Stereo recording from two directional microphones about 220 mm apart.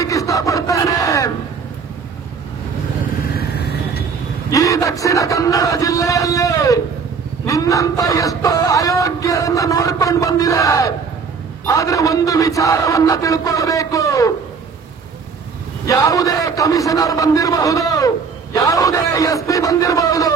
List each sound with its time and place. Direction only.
0.0 s a sound: 15° left (ahead or behind)
3.3 s vehicle: 45° left (ahead or behind)
4.5 s a man's voice: 15° left (ahead or behind)
7.4 s a sound: 15° left (ahead or behind)
11.6 s a man's voice: 15° left (ahead or behind)
15.9 s a man's voice: 15° left (ahead or behind)